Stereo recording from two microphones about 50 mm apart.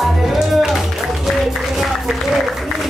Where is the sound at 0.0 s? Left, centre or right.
Centre.